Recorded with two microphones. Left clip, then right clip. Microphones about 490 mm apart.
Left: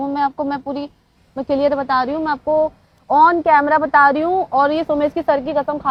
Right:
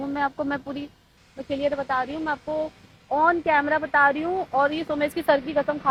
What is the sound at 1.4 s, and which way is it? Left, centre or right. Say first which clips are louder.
A woman's voice: left 8 dB; left.